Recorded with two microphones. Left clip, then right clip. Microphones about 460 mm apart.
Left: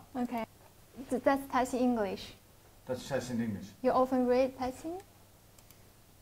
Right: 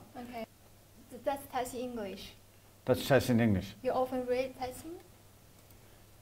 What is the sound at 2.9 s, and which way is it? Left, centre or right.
Speech, right.